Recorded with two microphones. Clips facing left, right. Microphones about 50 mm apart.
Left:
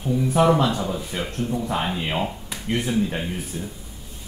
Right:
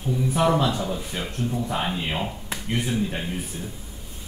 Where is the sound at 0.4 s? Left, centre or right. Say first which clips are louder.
Left 3 dB; centre.